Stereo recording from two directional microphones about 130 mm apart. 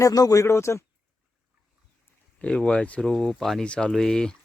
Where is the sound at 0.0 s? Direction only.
25° left (ahead or behind).